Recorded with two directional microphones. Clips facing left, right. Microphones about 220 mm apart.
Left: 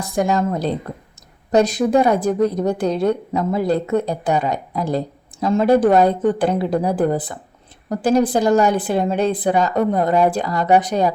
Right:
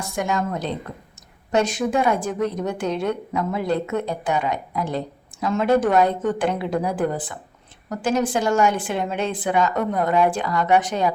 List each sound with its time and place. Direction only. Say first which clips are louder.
0.0 s a woman's voice: left 5 dB; 35° left (ahead or behind)